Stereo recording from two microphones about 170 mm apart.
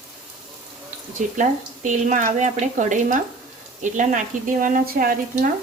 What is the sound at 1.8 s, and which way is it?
Speech, 45° right (ahead or behind).